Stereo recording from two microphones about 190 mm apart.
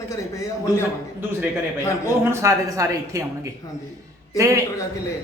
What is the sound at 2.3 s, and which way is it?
Speech, 15° right (ahead or behind).